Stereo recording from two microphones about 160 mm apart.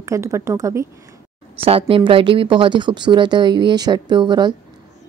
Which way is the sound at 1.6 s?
35° right (ahead or behind).